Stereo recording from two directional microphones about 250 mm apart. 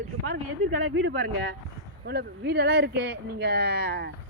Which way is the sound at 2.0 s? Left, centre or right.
Right.